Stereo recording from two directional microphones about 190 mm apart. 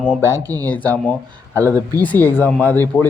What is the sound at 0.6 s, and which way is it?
Speech, 10° left (ahead or behind).